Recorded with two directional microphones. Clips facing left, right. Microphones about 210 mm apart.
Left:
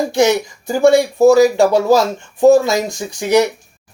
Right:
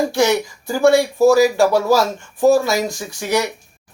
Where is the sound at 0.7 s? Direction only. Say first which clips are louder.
Left 2 dB; 20° left (ahead or behind).